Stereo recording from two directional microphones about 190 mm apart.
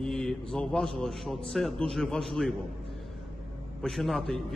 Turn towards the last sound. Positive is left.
turn(degrees=0)  # may be behind; listen again after turning